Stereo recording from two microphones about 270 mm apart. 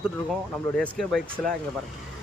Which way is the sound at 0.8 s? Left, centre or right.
Centre.